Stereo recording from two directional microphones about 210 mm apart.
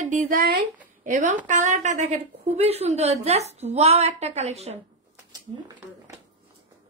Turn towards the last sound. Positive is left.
turn(degrees=-25)  # may be behind; listen again after turning